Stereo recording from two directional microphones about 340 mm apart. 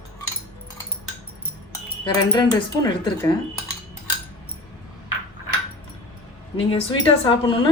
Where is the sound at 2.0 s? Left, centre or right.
Centre.